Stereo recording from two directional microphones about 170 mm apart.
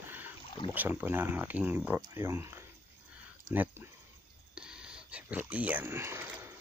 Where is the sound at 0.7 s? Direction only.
10° right (ahead or behind).